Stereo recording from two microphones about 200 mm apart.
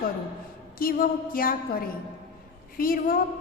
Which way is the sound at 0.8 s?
45° left (ahead or behind).